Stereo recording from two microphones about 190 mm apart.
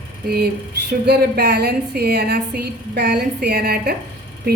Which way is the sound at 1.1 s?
60° right (ahead or behind).